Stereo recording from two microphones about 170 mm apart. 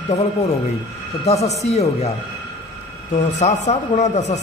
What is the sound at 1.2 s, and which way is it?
A man's voice, 40° left (ahead or behind).